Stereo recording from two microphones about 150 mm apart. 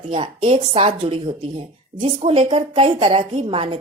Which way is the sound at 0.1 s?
35° right (ahead or behind).